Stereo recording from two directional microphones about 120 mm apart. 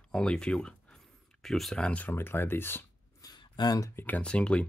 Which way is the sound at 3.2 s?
35° left (ahead or behind).